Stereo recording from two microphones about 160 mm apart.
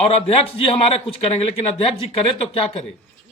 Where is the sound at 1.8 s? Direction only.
35° left (ahead or behind).